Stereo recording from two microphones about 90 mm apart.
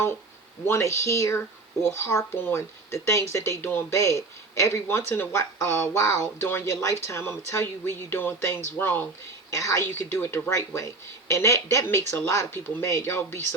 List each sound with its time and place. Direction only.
0.7 s speech: 35° left (ahead or behind)